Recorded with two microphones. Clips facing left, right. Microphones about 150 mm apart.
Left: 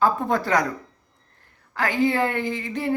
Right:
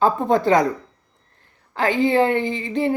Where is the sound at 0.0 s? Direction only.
20° right (ahead or behind).